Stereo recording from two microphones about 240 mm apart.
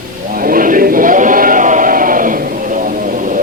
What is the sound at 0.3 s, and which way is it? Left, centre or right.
Sheep, right.